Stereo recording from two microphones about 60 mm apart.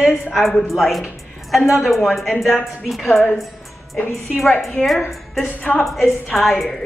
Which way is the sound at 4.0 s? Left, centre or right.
Left.